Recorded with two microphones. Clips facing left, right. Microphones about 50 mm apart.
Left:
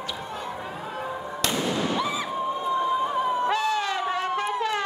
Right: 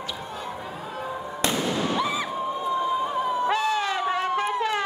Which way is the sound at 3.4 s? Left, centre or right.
Centre.